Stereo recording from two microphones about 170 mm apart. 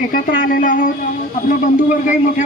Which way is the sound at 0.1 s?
55° left (ahead or behind).